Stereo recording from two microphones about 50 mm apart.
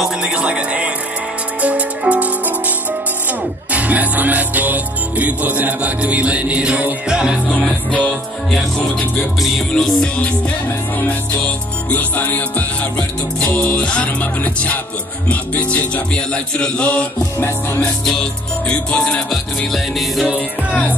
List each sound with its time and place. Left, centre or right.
0.0 s music: centre
7.9 s music: left
9.8 s music: centre
11.4 s music: left
13.7 s music: left
18.0 s music: centre
19.7 s music: centre